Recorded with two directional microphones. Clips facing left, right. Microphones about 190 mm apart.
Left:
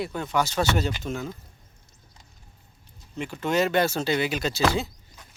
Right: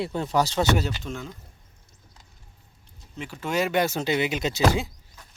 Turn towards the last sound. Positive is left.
turn(degrees=-15)  # may be behind; listen again after turning